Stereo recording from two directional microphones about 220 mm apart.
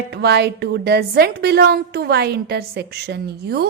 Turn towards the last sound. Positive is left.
turn(degrees=-45)  # may be behind; listen again after turning